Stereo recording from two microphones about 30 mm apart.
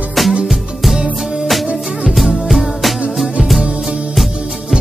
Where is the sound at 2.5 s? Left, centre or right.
Centre.